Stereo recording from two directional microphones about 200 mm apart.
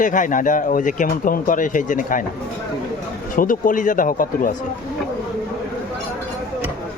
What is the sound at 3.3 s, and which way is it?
Speech, 45° left (ahead or behind).